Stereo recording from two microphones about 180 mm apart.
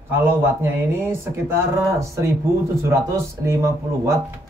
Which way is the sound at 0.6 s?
15° right (ahead or behind).